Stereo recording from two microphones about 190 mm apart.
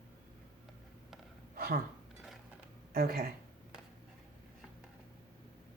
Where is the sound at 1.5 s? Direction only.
50° right (ahead or behind).